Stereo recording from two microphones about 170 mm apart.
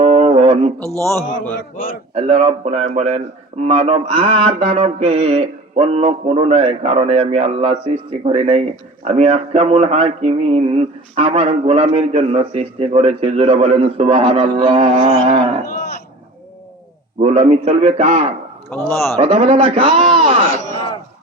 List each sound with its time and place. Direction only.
0.0 s a sound: 40° right (ahead or behind)
0.9 s a man's voice: 15° left (ahead or behind)
2.1 s speech: 35° right (ahead or behind)
17.2 s speech: 40° right (ahead or behind)
18.7 s a man's voice: 10° left (ahead or behind)
19.2 s speech: 35° right (ahead or behind)
20.2 s a sound: 35° right (ahead or behind)